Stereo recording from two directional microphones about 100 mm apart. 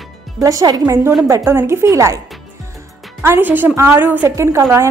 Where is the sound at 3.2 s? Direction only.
20° right (ahead or behind).